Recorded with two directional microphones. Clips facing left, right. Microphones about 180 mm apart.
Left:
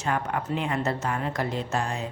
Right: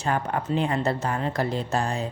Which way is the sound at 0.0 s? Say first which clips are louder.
Right 2 dB; 35° right (ahead or behind).